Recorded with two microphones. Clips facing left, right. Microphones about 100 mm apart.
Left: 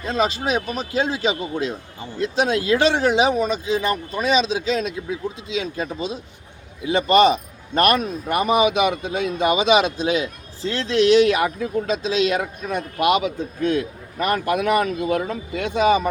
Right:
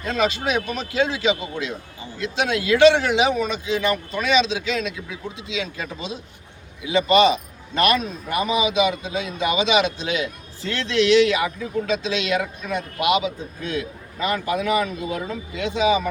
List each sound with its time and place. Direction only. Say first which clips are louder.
0.0 s speech: left 1 dB; 35° left (ahead or behind); by 11.9 s 50° left (ahead or behind)
12.0 s speech: left 3 dB; 40° left (ahead or behind)